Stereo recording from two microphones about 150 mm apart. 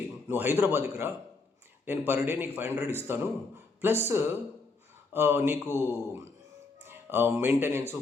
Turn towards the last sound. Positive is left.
turn(degrees=-15)  # may be behind; listen again after turning